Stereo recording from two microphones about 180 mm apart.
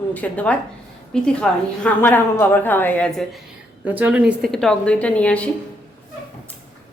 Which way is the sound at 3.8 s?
10° right (ahead or behind).